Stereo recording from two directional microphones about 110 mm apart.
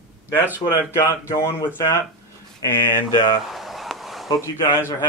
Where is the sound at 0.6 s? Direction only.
45° left (ahead or behind).